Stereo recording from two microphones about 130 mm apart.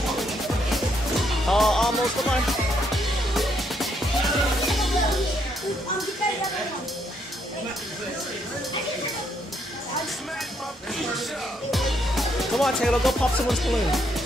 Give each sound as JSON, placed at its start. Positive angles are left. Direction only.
{"t": 0.2, "sound": "music", "side_deg": 0}
{"t": 3.3, "sound": "music", "side_deg": 0}
{"t": 11.7, "sound": "speech", "side_deg": 0}